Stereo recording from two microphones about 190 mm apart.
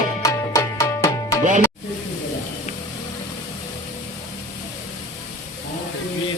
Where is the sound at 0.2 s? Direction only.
15° left (ahead or behind).